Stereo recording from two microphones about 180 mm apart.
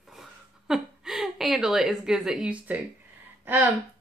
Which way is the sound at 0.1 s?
Centre (ahead or behind).